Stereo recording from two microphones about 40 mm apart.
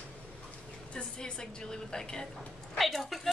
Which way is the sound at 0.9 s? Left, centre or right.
Left.